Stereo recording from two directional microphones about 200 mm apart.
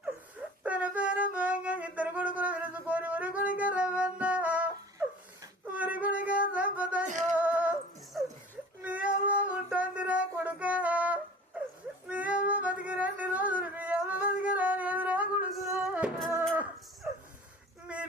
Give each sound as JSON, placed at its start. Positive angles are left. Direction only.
{"t": 0.6, "sound": "wind instrument", "side_deg": -5}
{"t": 5.7, "sound": "a sound", "side_deg": -10}
{"t": 7.1, "sound": "music", "side_deg": -40}
{"t": 7.3, "sound": "music", "side_deg": -10}
{"t": 8.8, "sound": "a sound", "side_deg": -5}
{"t": 12.0, "sound": "music", "side_deg": -5}
{"t": 12.8, "sound": "yodeling", "side_deg": -5}